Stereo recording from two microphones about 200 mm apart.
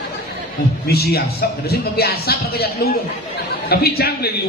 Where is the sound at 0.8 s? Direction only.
50° left (ahead or behind).